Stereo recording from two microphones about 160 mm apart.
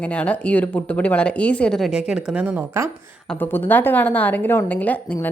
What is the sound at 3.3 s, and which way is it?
Speech, 10° left (ahead or behind).